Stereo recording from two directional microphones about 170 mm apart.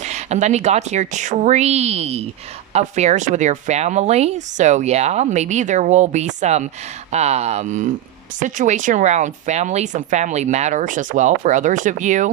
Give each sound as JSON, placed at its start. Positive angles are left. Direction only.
{"t": 0.0, "sound": "speech", "side_deg": -40}